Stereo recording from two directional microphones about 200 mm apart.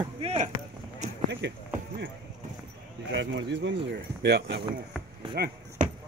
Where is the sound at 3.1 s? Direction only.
65° right (ahead or behind).